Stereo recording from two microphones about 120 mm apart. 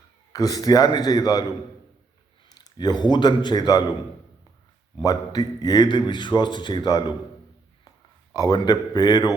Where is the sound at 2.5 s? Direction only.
35° left (ahead or behind).